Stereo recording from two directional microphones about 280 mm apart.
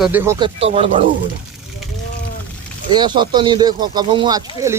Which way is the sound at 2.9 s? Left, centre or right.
Centre.